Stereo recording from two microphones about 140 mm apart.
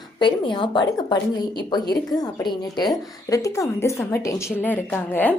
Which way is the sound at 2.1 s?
30° left (ahead or behind).